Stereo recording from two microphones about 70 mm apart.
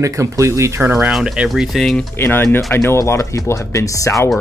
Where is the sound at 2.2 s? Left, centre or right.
Left.